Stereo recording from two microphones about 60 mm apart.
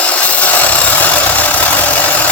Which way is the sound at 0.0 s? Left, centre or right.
Left.